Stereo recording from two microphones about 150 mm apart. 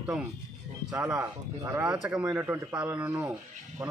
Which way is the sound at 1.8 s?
5° right (ahead or behind).